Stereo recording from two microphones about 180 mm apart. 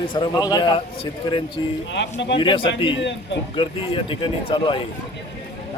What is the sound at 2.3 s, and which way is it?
Speech, 30° left (ahead or behind).